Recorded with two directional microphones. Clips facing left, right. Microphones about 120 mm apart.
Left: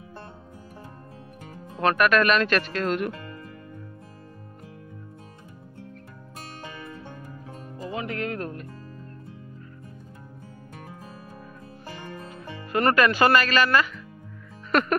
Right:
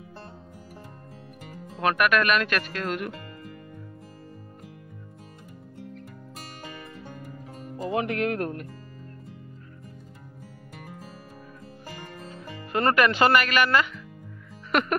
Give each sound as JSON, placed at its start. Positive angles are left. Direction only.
{"t": 1.8, "sound": "speech", "side_deg": -10}
{"t": 7.9, "sound": "speech", "side_deg": -70}
{"t": 12.7, "sound": "speech", "side_deg": -20}
{"t": 14.7, "sound": "music", "side_deg": -10}